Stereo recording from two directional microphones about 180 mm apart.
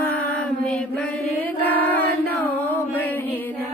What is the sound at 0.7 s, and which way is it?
Mantra, 5° left (ahead or behind).